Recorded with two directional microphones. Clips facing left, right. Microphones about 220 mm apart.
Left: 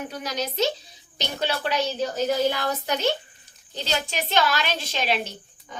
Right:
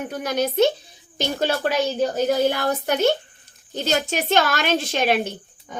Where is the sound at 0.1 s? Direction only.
55° right (ahead or behind).